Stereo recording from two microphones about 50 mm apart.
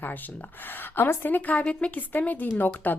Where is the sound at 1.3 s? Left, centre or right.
Left.